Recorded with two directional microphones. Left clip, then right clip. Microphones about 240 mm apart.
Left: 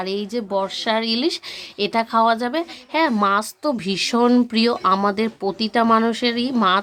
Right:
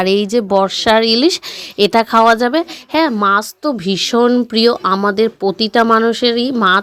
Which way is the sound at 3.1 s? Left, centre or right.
Centre.